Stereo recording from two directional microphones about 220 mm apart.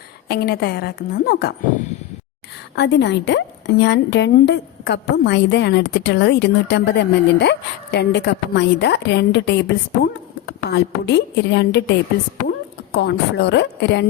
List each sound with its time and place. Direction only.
0.3 s a woman's voice: 45° left (ahead or behind)
2.7 s a woman's voice: 50° left (ahead or behind)
13.0 s a woman's voice: 50° left (ahead or behind)